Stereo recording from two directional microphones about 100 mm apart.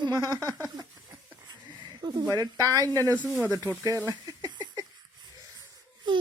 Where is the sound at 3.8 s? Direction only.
35° right (ahead or behind).